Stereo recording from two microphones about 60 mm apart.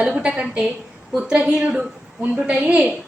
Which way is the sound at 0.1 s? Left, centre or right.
Right.